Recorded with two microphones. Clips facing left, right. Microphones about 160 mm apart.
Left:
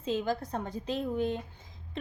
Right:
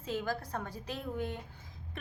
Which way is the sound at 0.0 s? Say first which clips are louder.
Left 5 dB; 20° left (ahead or behind).